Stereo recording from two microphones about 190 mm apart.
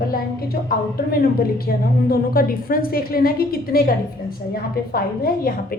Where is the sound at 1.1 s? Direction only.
50° left (ahead or behind).